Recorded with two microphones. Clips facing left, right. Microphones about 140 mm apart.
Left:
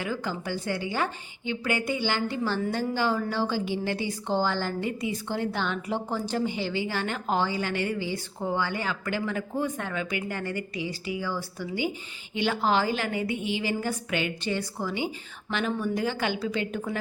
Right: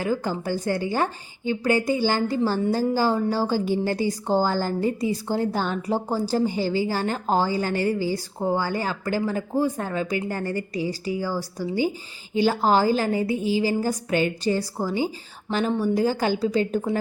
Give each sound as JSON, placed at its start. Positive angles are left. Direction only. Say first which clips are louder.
{"t": 0.0, "sound": "a woman's voice", "louder": "right 6 dB", "side_deg": -40}